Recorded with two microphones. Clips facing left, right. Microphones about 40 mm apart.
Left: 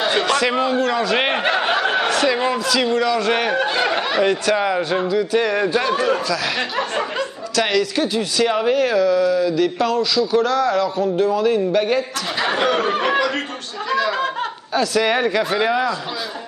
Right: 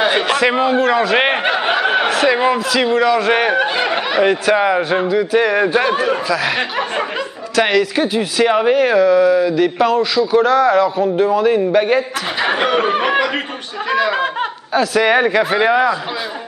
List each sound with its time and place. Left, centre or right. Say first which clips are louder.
0.0 s a man's voice: right 3 dB; centre